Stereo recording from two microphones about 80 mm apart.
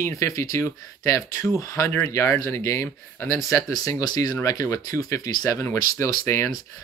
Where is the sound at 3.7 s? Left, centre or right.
Left.